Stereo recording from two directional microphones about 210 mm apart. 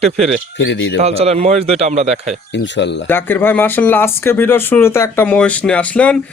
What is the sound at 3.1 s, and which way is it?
Speech, 10° left (ahead or behind).